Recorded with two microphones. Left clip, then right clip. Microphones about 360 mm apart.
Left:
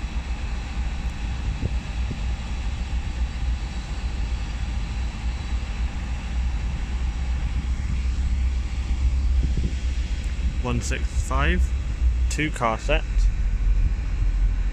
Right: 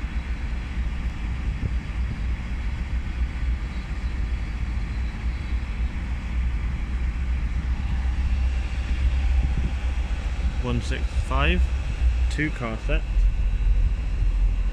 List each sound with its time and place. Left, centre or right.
10.6 s speech: centre